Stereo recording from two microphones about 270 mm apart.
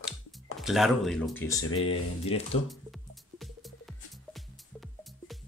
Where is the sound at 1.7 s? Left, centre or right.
Left.